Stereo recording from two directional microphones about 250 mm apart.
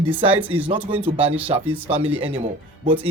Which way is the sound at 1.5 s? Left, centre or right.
Centre.